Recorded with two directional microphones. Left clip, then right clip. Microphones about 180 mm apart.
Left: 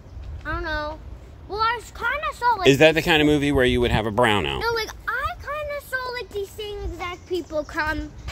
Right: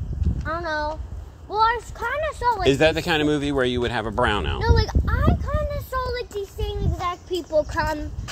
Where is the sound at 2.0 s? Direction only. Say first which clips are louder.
Even; 25° left (ahead or behind).